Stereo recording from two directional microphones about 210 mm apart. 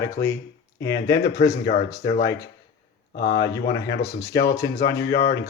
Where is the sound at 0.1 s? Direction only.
15° left (ahead or behind).